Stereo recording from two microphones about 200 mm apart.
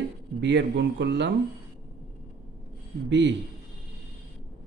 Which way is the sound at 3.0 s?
60° right (ahead or behind).